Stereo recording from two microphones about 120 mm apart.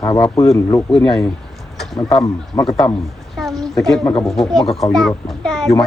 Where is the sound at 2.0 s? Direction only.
10° left (ahead or behind).